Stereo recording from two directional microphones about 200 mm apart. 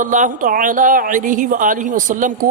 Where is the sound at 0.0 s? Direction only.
40° right (ahead or behind).